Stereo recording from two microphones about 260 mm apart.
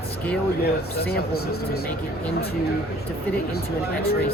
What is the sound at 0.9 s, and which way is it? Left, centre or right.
Speech, left.